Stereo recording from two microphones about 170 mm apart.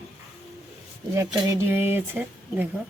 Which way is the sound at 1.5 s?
15° right (ahead or behind).